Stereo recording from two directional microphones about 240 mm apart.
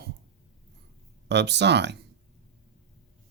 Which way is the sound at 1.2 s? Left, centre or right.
Right.